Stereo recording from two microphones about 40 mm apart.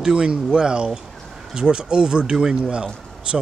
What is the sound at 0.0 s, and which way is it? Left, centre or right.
Speech, centre.